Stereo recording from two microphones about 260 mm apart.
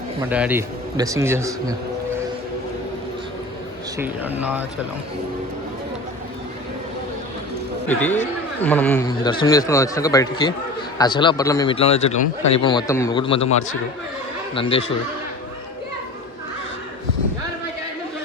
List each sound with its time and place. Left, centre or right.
0.2 s a man's voice: centre
3.9 s a man's voice: centre
7.9 s a man's voice: centre; by 12.3 s left
12.5 s a man's voice: centre
14.5 s speech: left